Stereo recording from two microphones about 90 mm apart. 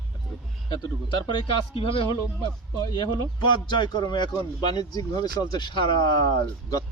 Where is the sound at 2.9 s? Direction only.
55° left (ahead or behind).